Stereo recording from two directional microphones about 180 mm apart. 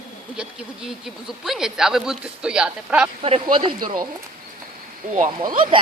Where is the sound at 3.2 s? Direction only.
30° right (ahead or behind).